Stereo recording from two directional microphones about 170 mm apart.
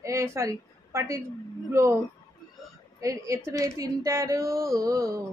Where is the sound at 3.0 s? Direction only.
20° right (ahead or behind).